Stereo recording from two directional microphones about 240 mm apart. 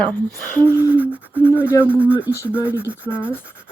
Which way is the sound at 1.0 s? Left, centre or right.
Centre.